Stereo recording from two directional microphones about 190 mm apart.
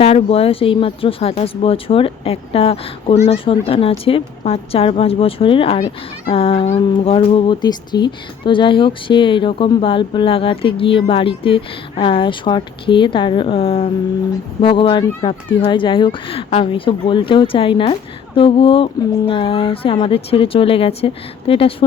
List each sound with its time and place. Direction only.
0.0 s speech: 30° left (ahead or behind)